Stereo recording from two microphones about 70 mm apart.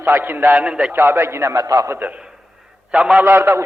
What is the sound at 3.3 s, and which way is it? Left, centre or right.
Speech, right.